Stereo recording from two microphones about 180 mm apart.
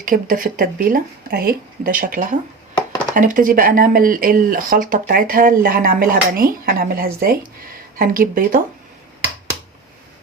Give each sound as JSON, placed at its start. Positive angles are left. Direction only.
{"t": 0.0, "sound": "speech", "side_deg": -50}